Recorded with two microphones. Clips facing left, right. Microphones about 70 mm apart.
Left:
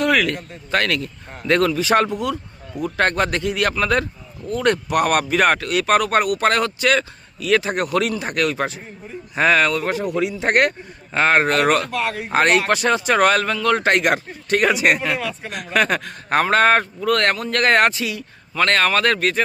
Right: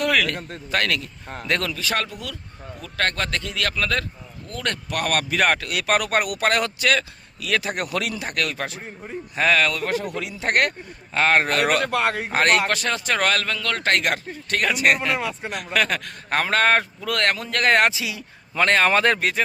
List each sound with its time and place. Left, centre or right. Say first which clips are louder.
0.0 s a sound: left 3 dB; centre
0.7 s speech: left 3 dB; centre
1.7 s a man's voice: left 9 dB; left; by 11.9 s centre
11.9 s speech: right 1 dB; right
12.3 s a man's voice: left 5 dB; centre
18.0 s speech: left 4 dB; centre